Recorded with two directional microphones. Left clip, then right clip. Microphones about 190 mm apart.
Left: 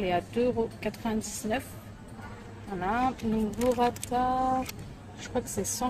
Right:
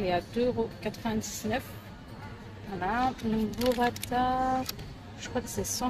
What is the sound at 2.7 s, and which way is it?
A woman's voice, 15° left (ahead or behind).